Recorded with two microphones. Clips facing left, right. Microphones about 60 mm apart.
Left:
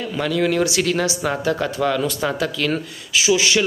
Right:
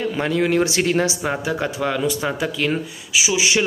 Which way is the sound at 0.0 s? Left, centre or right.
Right.